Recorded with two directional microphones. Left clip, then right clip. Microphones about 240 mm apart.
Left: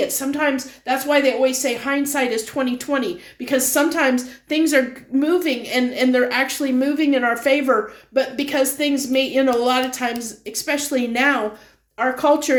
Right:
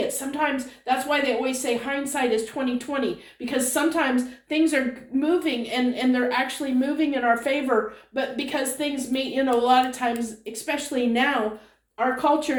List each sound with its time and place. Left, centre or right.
0.3 s a woman's voice: left